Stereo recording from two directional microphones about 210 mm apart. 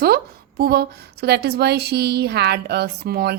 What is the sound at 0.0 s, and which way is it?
A woman's voice, 45° right (ahead or behind).